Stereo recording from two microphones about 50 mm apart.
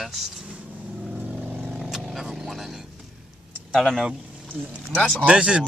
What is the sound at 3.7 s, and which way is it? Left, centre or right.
Speech, centre.